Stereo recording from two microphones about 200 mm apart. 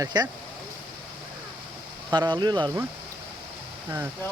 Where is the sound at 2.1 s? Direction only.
20° right (ahead or behind).